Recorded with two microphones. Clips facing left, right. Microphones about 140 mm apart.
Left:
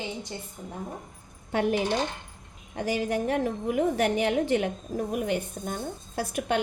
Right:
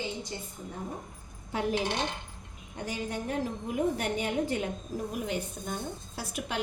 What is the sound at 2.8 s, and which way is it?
A woman's voice, 90° left.